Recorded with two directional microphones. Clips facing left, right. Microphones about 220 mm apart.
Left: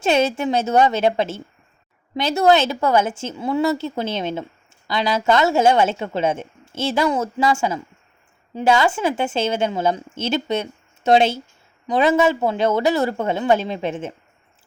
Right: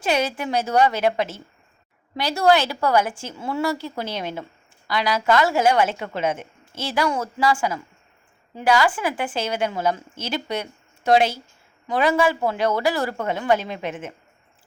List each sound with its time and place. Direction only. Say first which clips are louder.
0.0 s a woman's voice: left 5 dB; 25° left (ahead or behind)